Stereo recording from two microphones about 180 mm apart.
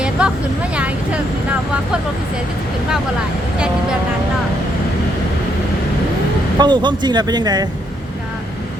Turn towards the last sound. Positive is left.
turn(degrees=-20)  # may be behind; listen again after turning